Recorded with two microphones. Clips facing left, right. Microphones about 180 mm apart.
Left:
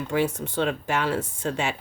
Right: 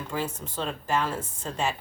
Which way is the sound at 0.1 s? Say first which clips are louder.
Left 8 dB; 75° left (ahead or behind).